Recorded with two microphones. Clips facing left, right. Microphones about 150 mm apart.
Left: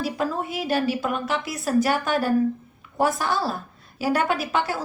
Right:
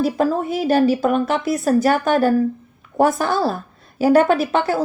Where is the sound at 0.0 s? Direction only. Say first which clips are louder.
Right 7 dB; 45° right (ahead or behind).